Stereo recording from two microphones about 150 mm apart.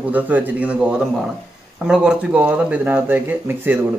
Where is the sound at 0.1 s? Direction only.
10° right (ahead or behind).